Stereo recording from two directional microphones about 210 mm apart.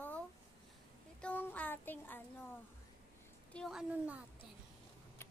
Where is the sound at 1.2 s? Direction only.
5° left (ahead or behind).